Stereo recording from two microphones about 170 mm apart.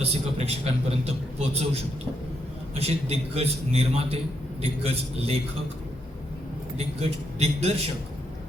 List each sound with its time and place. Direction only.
0.0 s a man's voice: 35° right (ahead or behind)
6.7 s a man's voice: 40° right (ahead or behind)